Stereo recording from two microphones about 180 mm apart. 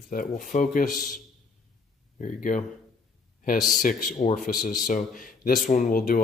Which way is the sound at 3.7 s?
50° left (ahead or behind).